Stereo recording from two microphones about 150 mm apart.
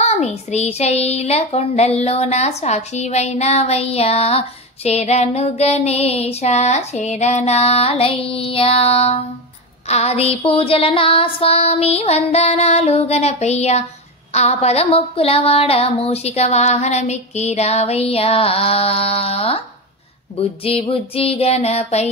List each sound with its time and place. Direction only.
0.0 s speech: 45° left (ahead or behind)
20.6 s music: 40° left (ahead or behind)